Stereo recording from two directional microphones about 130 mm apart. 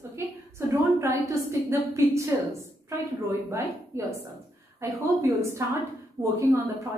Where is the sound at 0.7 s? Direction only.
20° right (ahead or behind).